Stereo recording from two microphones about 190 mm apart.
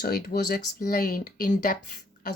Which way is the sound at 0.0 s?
55° left (ahead or behind).